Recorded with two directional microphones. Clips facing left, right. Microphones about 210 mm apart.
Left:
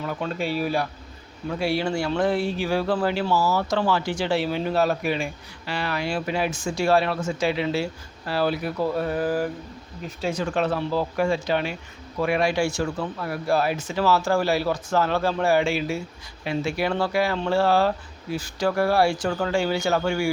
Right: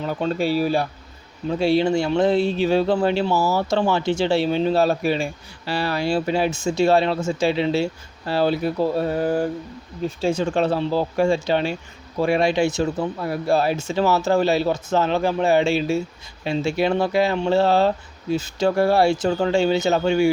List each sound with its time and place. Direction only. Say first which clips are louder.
0.0 s speech: right 5 dB; 30° right (ahead or behind)